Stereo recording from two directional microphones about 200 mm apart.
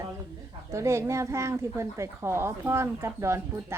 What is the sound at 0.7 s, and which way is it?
Speech, 15° right (ahead or behind).